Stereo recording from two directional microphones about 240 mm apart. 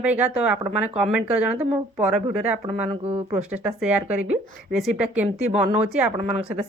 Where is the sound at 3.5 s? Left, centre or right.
Centre.